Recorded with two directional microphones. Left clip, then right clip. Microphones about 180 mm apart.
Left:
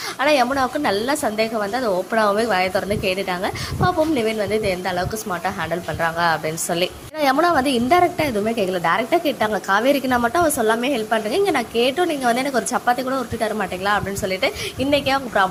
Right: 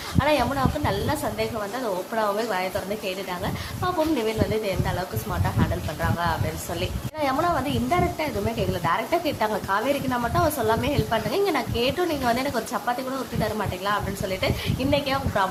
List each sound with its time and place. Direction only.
0.2 s a woman's voice: 25° left (ahead or behind)